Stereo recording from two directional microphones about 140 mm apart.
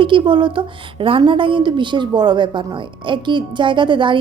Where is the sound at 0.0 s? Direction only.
35° right (ahead or behind).